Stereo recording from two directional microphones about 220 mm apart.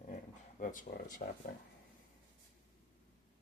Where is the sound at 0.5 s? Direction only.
35° left (ahead or behind).